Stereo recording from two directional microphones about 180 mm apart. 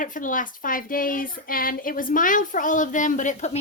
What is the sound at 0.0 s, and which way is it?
A woman's voice, 45° left (ahead or behind).